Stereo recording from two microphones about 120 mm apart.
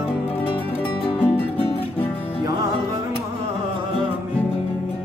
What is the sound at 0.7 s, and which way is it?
Music, 15° left (ahead or behind).